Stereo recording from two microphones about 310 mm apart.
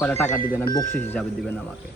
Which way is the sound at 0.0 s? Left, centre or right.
Centre.